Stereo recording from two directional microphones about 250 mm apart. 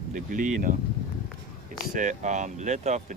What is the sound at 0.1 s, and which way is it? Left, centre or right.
Speech, right.